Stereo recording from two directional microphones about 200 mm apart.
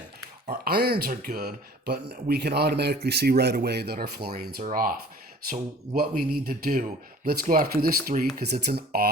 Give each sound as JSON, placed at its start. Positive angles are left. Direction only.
{"t": 0.4, "sound": "speech", "side_deg": -50}